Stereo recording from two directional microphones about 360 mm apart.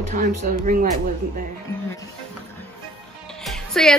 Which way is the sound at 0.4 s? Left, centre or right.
Right.